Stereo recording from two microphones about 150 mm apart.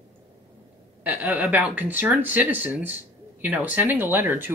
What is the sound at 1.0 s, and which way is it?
Speech, 10° right (ahead or behind).